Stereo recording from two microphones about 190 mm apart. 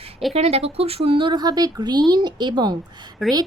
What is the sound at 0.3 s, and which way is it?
A woman's voice, 30° right (ahead or behind).